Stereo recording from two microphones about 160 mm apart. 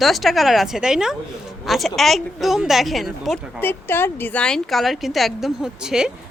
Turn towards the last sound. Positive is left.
turn(degrees=-5)  # may be behind; listen again after turning